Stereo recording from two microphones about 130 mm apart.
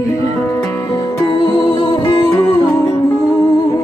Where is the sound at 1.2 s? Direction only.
35° left (ahead or behind).